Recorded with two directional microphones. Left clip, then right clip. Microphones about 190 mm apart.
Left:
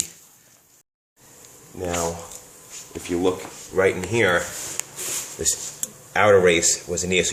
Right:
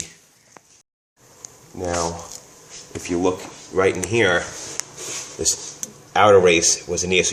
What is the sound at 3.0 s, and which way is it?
Speech, 15° right (ahead or behind).